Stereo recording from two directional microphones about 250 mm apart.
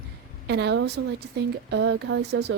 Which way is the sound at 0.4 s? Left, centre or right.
Right.